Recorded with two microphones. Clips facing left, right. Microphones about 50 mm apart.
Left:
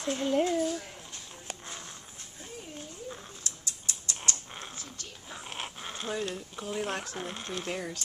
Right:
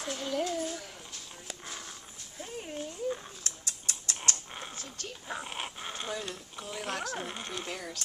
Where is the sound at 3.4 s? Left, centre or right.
Right.